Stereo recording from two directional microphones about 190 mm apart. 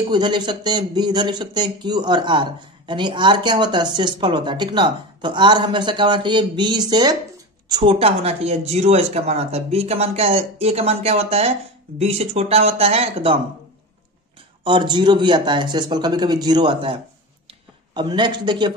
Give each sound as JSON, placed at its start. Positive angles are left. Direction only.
{"t": 0.1, "sound": "speech", "side_deg": -25}
{"t": 14.6, "sound": "speech", "side_deg": -25}
{"t": 17.9, "sound": "speech", "side_deg": -25}